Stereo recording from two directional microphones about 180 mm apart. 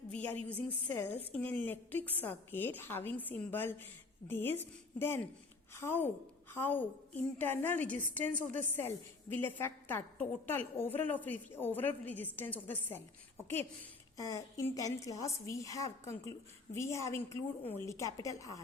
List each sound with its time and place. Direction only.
0.1 s a woman's voice: 10° left (ahead or behind)
8.3 s a woman's voice: 45° right (ahead or behind)
8.7 s a woman's voice: 10° left (ahead or behind)
14.2 s a woman's voice: 20° left (ahead or behind)